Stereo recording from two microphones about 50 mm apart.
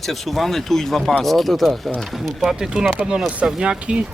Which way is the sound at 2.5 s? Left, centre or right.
Centre.